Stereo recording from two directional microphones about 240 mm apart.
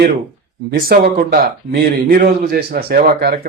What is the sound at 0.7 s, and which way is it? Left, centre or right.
Speech, right.